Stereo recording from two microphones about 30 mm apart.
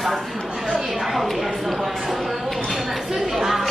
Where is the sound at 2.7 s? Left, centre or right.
Centre.